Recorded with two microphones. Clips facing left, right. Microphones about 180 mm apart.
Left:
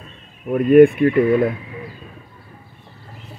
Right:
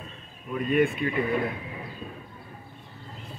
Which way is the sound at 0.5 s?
55° left (ahead or behind).